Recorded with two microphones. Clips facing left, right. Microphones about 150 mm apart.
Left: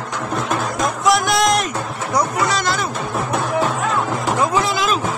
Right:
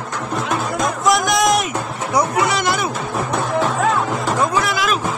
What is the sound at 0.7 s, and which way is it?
Music, centre (ahead or behind).